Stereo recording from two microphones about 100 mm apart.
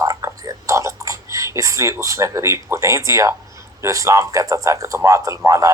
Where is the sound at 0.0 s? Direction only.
35° right (ahead or behind).